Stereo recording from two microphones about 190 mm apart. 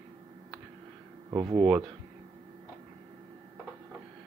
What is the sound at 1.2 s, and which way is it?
Speech, 20° right (ahead or behind).